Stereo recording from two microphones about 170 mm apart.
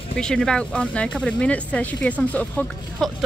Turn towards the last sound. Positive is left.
turn(degrees=5)  # may be behind; listen again after turning